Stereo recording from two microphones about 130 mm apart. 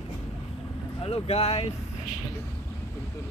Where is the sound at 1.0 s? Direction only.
50° left (ahead or behind).